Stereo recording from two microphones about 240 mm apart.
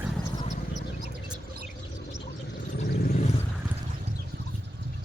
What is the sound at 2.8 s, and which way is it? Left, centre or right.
Vehicle, left.